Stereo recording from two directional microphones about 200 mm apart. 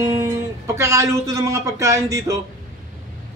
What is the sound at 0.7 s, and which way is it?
A man's voice, 15° right (ahead or behind).